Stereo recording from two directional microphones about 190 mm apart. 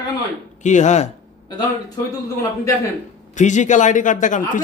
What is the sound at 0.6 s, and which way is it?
Speech, 40° left (ahead or behind).